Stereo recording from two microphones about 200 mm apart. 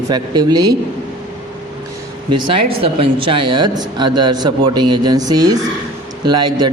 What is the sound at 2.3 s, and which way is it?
Speech, 25° right (ahead or behind).